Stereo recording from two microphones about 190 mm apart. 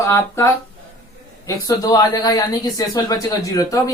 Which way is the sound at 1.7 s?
20° left (ahead or behind).